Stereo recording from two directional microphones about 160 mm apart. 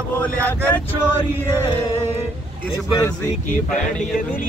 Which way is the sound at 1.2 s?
25° left (ahead or behind).